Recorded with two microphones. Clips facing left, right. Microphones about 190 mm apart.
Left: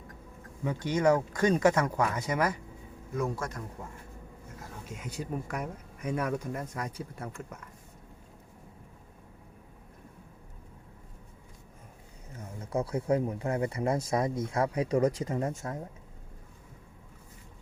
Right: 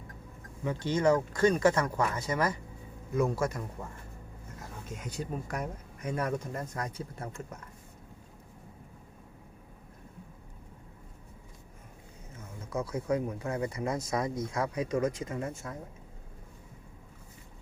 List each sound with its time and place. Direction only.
0.6 s speech: 15° left (ahead or behind)
3.2 s a man's voice: 10° right (ahead or behind)
4.9 s speech: 5° left (ahead or behind)
6.7 s speech: 30° right (ahead or behind)
12.7 s speech: 30° left (ahead or behind)